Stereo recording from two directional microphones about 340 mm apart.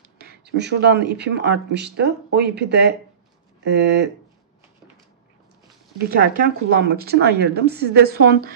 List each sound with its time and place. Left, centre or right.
0.2 s speech: right
6.0 s speech: right